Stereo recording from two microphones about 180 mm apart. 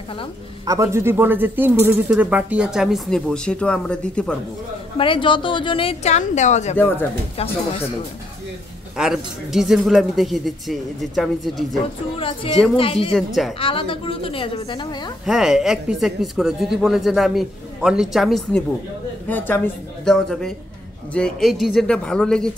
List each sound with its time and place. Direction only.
0.7 s speech: 15° right (ahead or behind); by 4.4 s 5° left (ahead or behind)
4.9 s a woman's voice: 30° left (ahead or behind)
8.9 s speech: 5° right (ahead or behind)
12.7 s a woman's voice: 30° left (ahead or behind)
13.1 s speech: centre (ahead or behind)
13.6 s a woman's voice: 30° left (ahead or behind)
15.2 s speech: centre (ahead or behind)